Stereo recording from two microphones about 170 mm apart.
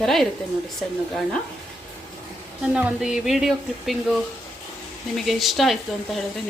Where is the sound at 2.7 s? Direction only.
5° right (ahead or behind).